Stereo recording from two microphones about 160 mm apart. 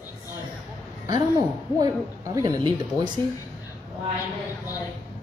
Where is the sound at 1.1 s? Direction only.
25° right (ahead or behind).